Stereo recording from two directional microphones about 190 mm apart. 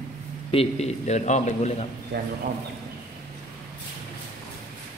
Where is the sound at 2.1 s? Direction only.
60° right (ahead or behind).